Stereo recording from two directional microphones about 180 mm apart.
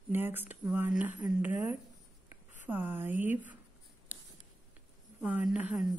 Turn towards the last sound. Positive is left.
turn(degrees=-5)  # may be behind; listen again after turning